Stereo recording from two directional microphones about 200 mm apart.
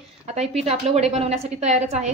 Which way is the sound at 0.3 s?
35° right (ahead or behind).